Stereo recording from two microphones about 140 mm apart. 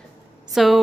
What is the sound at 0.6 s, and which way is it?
Speech, centre (ahead or behind).